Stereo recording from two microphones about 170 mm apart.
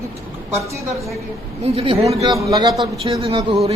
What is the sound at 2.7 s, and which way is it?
Speech, centre (ahead or behind).